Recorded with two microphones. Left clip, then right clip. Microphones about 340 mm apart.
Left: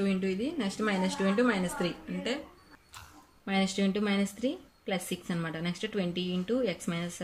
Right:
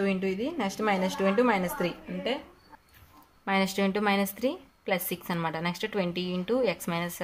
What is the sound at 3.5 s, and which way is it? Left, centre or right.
A woman's voice, centre.